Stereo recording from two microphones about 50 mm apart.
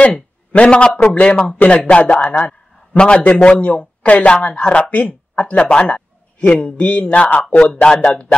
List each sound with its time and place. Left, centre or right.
0.5 s a man's voice: left